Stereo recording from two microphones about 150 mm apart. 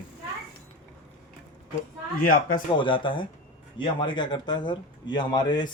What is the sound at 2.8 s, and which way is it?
Speech, 35° left (ahead or behind).